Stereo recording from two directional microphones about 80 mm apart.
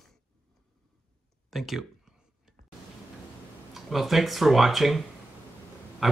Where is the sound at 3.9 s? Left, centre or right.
Centre.